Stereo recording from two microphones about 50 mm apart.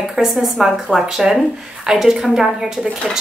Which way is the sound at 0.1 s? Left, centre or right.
Centre.